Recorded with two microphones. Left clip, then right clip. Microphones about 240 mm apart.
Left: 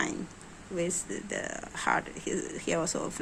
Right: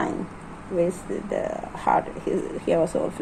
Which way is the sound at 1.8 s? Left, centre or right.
Left.